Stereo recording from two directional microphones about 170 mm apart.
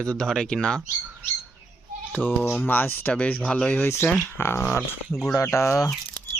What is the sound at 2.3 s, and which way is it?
Speech, 10° left (ahead or behind).